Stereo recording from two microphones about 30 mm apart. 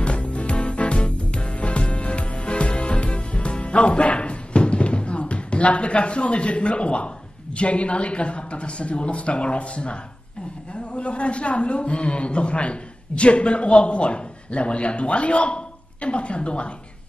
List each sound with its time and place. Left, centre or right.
0.0 s music: left
7.5 s a man's voice: left